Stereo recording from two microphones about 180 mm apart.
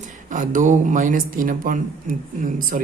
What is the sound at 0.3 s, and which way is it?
Speech, 45° right (ahead or behind).